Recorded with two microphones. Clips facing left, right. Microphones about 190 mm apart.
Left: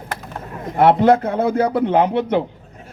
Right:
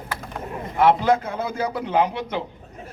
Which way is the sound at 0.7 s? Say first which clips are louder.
Left 5 dB; 55° left (ahead or behind).